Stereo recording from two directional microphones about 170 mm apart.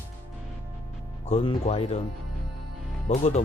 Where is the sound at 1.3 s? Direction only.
35° left (ahead or behind).